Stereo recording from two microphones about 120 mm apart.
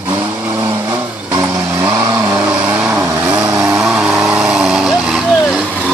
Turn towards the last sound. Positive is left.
turn(degrees=-5)  # may be behind; listen again after turning